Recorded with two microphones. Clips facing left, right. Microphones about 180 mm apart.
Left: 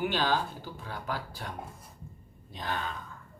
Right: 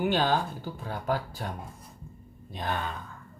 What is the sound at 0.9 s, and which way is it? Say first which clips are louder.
Speech: right 7 dB; 50° right (ahead or behind).